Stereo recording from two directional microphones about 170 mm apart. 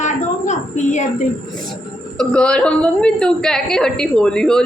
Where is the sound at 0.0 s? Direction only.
45° left (ahead or behind).